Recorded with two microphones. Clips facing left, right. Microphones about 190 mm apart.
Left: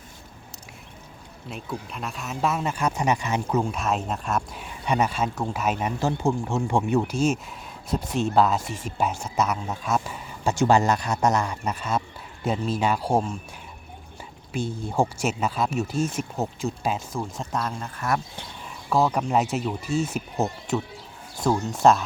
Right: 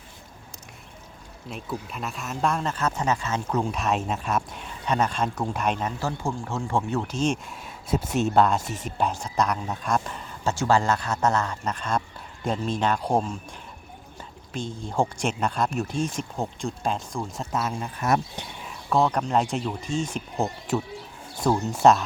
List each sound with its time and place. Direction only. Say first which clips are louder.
1.5 s speech: even; centre (ahead or behind); by 3.6 s 15° left (ahead or behind)
3.6 s speech: even; centre (ahead or behind)
6.0 s speech: left 5 dB; 20° left (ahead or behind)
7.9 s speech: right 1 dB; 5° right (ahead or behind)
10.5 s speech: left 3 dB; 20° left (ahead or behind)
14.5 s speech: left 2 dB; 10° left (ahead or behind)
17.9 s speech: right 4 dB; 20° right (ahead or behind)
18.6 s speech: even; 5° left (ahead or behind)